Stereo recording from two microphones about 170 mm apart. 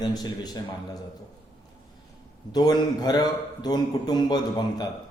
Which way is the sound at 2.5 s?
25° left (ahead or behind).